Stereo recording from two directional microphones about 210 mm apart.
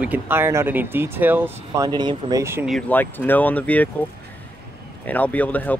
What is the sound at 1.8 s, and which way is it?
Speech, 20° right (ahead or behind).